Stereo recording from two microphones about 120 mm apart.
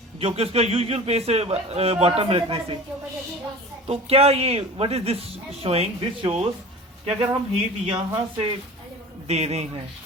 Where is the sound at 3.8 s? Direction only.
55° right (ahead or behind).